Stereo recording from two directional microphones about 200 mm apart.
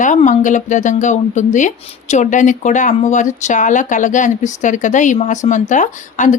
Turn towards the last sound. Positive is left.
turn(degrees=40)  # may be behind; listen again after turning